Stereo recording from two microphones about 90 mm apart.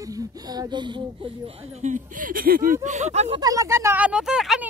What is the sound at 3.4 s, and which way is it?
Speech, 40° right (ahead or behind).